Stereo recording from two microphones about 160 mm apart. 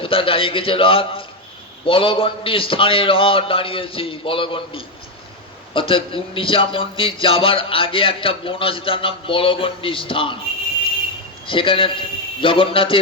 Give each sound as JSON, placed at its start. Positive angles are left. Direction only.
{"t": 0.0, "sound": "a man's voice", "side_deg": 35}
{"t": 11.4, "sound": "a man's voice", "side_deg": 35}